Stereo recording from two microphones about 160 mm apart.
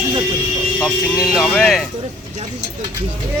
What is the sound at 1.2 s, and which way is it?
Speech, 5° right (ahead or behind).